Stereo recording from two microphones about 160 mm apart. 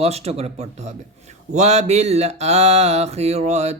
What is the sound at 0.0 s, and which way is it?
Speech, 40° right (ahead or behind).